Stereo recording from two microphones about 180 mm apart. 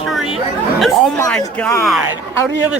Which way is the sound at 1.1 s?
15° left (ahead or behind).